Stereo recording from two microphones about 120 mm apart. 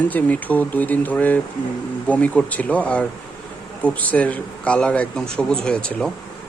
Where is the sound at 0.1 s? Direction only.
15° left (ahead or behind).